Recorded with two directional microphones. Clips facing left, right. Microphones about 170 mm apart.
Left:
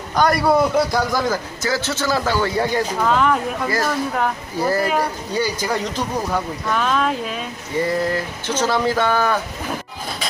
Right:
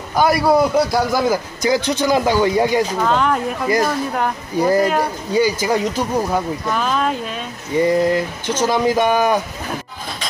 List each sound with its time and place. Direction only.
0.1 s a man's voice: 5° right (ahead or behind)
3.0 s speech: centre (ahead or behind)
3.6 s a man's voice: 15° right (ahead or behind); by 7.3 s centre (ahead or behind)
7.8 s a man's voice: 15° right (ahead or behind)